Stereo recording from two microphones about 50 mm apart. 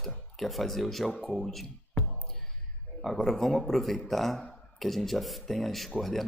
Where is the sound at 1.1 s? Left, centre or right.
Left.